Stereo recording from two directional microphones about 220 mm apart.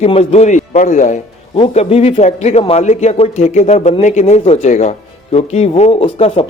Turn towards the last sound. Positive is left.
turn(degrees=25)  # may be behind; listen again after turning